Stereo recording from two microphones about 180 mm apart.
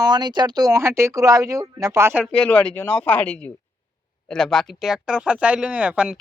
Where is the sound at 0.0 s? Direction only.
25° right (ahead or behind).